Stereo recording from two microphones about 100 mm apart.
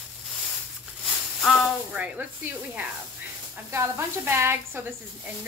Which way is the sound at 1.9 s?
15° right (ahead or behind).